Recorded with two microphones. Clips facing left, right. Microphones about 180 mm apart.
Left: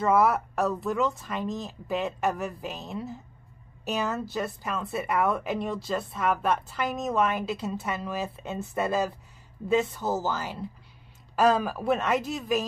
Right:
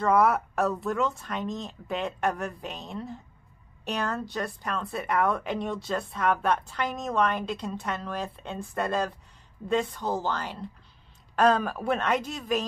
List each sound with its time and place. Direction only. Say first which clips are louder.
0.0 s a woman's voice: even; 5° left (ahead or behind)